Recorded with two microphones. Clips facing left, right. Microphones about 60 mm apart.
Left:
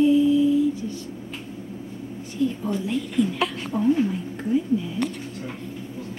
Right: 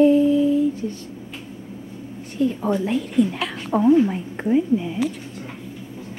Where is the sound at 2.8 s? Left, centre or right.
Right.